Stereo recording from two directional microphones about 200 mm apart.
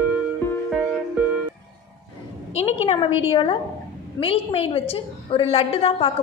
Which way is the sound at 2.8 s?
30° left (ahead or behind).